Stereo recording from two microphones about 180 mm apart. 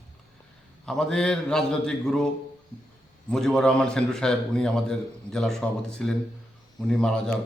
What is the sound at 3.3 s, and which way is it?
A man's voice, centre (ahead or behind).